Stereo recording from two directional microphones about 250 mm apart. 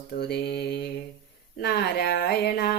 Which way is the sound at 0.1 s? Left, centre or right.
Left.